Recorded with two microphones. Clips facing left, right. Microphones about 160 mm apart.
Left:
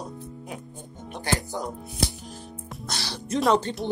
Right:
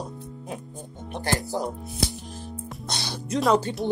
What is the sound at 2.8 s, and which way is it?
Speech, 20° right (ahead or behind).